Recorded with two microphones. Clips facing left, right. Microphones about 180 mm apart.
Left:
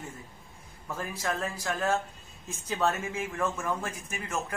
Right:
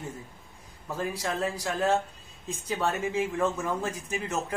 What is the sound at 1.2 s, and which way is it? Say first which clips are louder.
A man's voice: left 1 dB; 15° right (ahead or behind).